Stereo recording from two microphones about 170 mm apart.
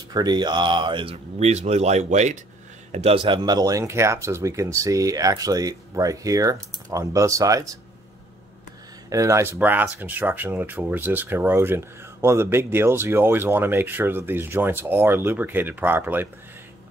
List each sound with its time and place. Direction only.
0.1 s speech: 25° right (ahead or behind)
9.1 s speech: 15° right (ahead or behind)